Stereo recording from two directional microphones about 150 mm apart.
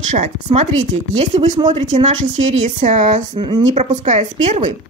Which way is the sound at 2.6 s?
55° right (ahead or behind).